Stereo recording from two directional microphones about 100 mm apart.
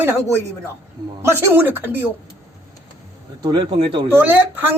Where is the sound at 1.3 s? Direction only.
20° right (ahead or behind).